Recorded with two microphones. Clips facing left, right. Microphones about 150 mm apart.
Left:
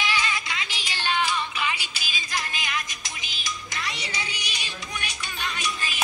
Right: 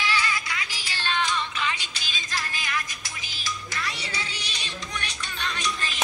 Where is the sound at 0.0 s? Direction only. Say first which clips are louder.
Even; 20° left (ahead or behind).